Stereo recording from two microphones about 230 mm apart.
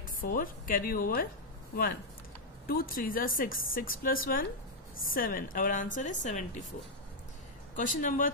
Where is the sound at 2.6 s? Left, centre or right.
Left.